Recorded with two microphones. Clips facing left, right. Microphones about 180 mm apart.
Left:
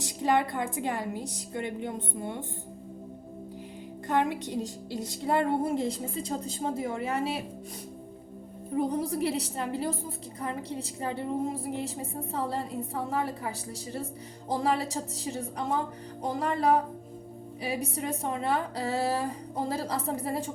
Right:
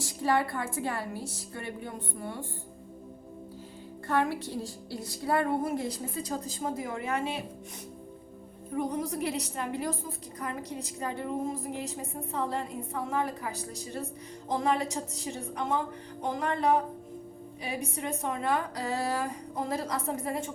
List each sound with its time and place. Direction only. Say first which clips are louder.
0.0 s a woman's voice: left 1 dB; 20° left (ahead or behind)
4.0 s a woman's voice: left 1 dB; 20° left (ahead or behind)
8.7 s speech: left 3 dB; 30° left (ahead or behind)
14.5 s speech: even; 35° left (ahead or behind)
17.9 s speech: left 1 dB; 35° left (ahead or behind)